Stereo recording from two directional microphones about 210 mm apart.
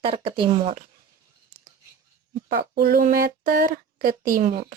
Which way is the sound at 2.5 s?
45° right (ahead or behind).